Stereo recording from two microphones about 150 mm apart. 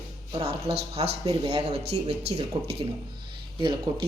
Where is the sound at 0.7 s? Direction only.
5° right (ahead or behind).